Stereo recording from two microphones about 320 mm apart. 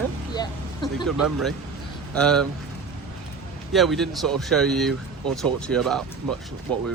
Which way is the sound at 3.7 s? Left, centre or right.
Centre.